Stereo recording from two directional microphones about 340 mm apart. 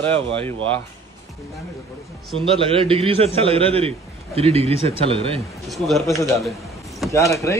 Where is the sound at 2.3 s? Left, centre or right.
Centre.